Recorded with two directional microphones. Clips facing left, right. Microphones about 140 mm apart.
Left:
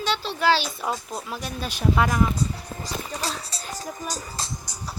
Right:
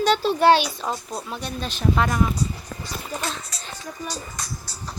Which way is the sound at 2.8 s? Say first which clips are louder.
Even; 35° left (ahead or behind).